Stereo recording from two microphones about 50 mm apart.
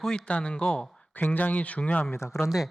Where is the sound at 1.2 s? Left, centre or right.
Left.